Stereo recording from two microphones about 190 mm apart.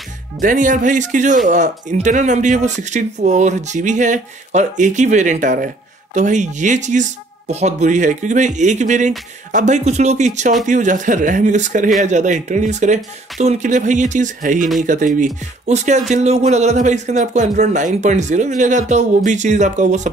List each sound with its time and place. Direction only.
0.4 s a man's voice: 45° right (ahead or behind)